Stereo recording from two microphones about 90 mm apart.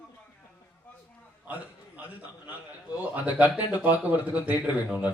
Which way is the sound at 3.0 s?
15° right (ahead or behind).